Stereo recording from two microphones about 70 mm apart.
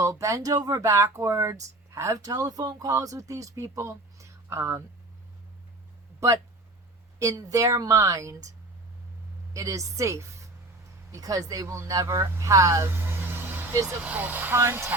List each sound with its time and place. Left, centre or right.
0.0 s speech: right
6.1 s speech: right
9.5 s a woman's voice: right
11.1 s speech: right
14.0 s speech: right